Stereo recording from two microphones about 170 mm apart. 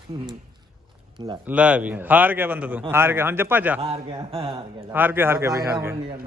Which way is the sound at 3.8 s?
35° right (ahead or behind).